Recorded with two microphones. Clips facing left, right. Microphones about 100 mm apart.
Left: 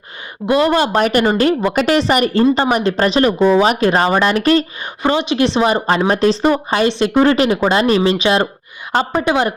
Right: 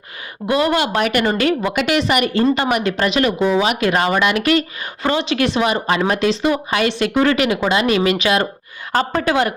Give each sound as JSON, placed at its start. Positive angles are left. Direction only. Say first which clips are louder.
{"t": 0.4, "sound": "a woman's voice", "louder": "left 3 dB", "side_deg": 25}
{"t": 5.0, "sound": "a woman's voice", "louder": "left 3 dB", "side_deg": 20}